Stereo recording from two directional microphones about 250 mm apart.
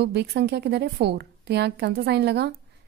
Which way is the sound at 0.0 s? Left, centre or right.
Right.